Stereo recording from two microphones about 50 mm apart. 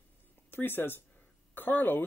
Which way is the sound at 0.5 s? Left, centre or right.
Left.